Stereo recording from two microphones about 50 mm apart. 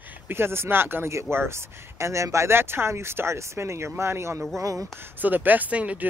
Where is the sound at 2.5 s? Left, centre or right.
Right.